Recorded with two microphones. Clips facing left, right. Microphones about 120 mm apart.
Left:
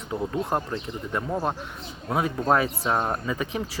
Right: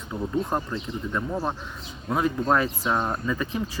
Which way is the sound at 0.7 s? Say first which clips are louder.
Even; 20° left (ahead or behind).